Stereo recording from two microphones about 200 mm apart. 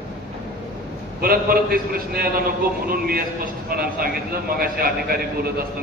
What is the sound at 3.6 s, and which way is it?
A man's voice, 50° right (ahead or behind).